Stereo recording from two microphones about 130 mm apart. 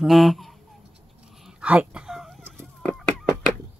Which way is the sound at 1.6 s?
10° right (ahead or behind).